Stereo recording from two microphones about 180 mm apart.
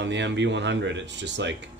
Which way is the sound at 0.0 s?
80° right.